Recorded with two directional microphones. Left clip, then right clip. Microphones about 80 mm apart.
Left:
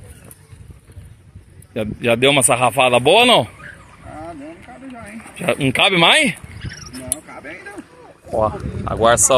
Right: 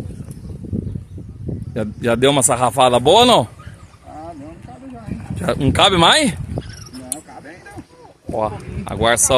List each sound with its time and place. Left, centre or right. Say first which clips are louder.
1.7 s speech: left 1 dB; right
5.4 s speech: right 1 dB; right
8.4 s speech: left 3 dB; centre